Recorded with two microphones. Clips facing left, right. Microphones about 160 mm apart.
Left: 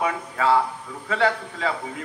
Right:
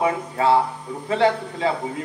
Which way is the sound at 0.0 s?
30° right (ahead or behind).